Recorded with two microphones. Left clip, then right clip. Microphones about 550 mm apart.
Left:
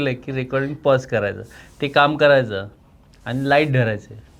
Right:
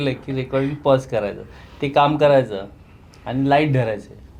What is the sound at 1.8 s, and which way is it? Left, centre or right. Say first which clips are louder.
Speech: even; left.